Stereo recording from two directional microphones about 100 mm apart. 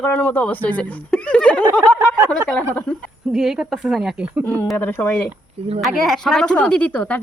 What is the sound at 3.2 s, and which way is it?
Speech, 5° right (ahead or behind).